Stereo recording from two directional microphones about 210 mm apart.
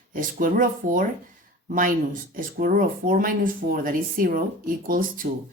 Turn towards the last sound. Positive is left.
turn(degrees=-40)  # may be behind; listen again after turning